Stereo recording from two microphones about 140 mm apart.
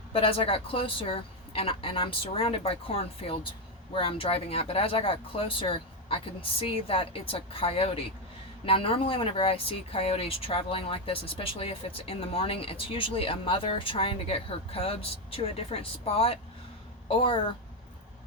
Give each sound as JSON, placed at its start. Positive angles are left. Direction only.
{"t": 0.1, "sound": "speech", "side_deg": 40}